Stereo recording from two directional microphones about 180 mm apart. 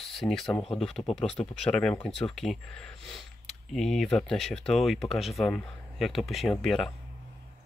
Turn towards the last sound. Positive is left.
turn(degrees=0)  # may be behind; listen again after turning